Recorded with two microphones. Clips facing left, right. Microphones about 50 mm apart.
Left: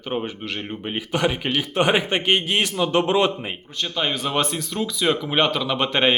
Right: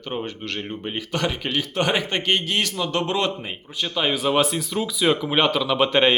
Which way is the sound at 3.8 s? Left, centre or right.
Centre.